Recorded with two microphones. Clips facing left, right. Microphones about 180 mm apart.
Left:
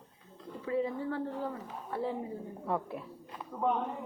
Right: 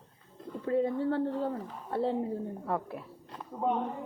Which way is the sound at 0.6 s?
60° right (ahead or behind).